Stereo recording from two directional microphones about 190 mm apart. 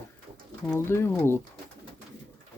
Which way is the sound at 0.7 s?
15° left (ahead or behind).